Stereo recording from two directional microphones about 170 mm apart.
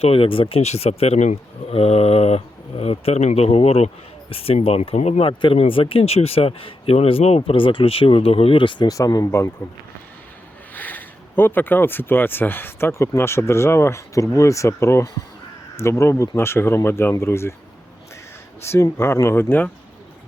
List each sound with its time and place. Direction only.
0.0 s speech: 35° left (ahead or behind); by 9.5 s 20° left (ahead or behind)
10.8 s speech: 10° left (ahead or behind)
18.6 s speech: 15° left (ahead or behind)